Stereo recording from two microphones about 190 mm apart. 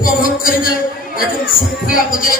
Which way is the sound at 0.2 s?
50° left (ahead or behind).